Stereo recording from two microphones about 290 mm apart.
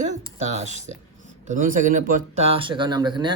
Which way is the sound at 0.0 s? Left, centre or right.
Right.